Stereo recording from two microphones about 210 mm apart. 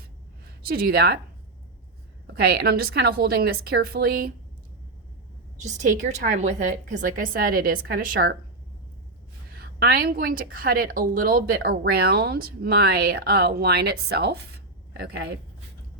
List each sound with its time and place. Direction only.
0.6 s a woman's voice: 45° right (ahead or behind)
2.2 s a woman's voice: 50° right (ahead or behind)
5.6 s a woman's voice: 35° right (ahead or behind)
9.5 s a woman's voice: 45° right (ahead or behind)